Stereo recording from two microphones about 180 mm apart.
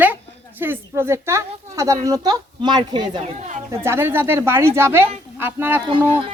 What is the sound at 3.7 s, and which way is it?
A woman's voice, 15° right (ahead or behind).